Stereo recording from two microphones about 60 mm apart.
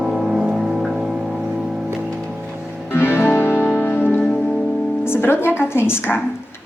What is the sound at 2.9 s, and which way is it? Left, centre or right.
Music, left.